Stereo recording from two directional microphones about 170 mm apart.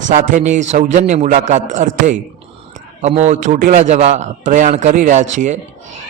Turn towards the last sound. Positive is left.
turn(degrees=-45)  # may be behind; listen again after turning